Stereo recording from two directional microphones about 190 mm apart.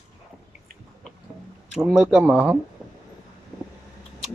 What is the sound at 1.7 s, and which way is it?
Speech, centre (ahead or behind).